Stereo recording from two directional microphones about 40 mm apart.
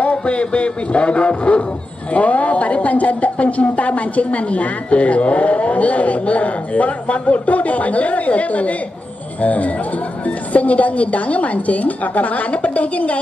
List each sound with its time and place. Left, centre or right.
0.0 s speech: left